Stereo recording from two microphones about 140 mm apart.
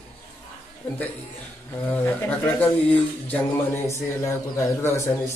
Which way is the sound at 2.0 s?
15° left (ahead or behind).